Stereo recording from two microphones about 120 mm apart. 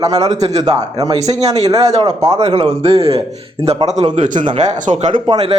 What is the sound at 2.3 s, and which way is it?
Speech, 60° right (ahead or behind).